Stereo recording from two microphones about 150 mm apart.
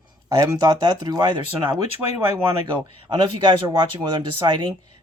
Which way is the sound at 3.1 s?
30° right (ahead or behind).